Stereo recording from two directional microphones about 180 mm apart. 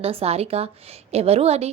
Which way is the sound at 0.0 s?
35° right (ahead or behind).